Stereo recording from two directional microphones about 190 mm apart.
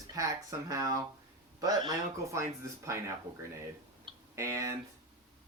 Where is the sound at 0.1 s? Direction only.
15° right (ahead or behind).